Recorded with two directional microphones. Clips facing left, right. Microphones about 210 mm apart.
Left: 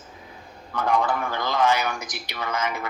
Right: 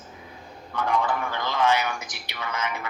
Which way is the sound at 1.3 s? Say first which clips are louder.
Left 1 dB; 40° left (ahead or behind).